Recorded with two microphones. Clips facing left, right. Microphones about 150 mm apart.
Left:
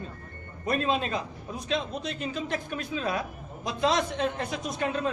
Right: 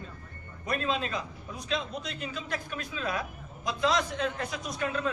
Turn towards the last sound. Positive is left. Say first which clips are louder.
# left 3 dB
turn(degrees=25)  # may be behind; listen again after turning